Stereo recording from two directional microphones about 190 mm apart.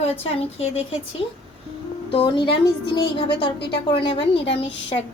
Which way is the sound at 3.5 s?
60° left (ahead or behind).